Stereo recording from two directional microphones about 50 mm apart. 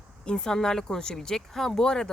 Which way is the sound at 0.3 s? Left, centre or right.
Centre.